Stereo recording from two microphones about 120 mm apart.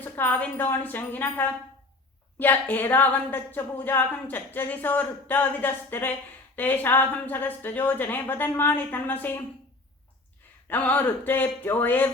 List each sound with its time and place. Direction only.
0.0 s speech: 15° left (ahead or behind)
10.7 s speech: 15° left (ahead or behind)